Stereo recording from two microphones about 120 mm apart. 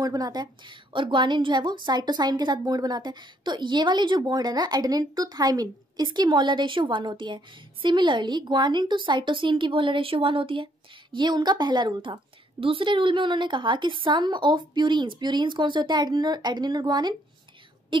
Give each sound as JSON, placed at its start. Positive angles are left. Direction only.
{"t": 0.0, "sound": "a woman's voice", "side_deg": -30}